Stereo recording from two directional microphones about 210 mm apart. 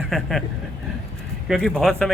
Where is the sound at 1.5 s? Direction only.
Centre (ahead or behind).